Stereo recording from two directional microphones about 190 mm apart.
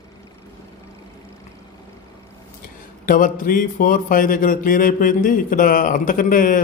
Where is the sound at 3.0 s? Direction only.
45° left (ahead or behind).